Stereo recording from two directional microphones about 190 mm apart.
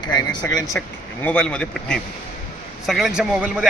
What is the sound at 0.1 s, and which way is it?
Speech, 20° left (ahead or behind).